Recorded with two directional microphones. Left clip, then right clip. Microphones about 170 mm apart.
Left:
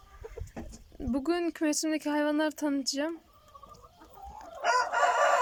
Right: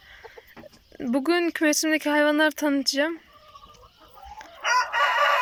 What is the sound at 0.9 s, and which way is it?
Speech, centre (ahead or behind).